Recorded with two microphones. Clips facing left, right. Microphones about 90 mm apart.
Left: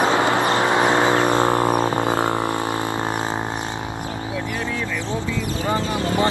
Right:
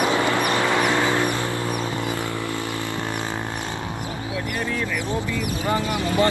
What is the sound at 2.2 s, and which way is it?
Vehicle, 55° left (ahead or behind).